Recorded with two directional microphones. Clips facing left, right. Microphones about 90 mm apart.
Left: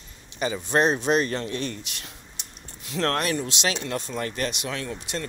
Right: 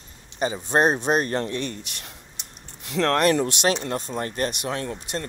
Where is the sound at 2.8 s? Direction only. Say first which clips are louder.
Right 5 dB; 60° right (ahead or behind).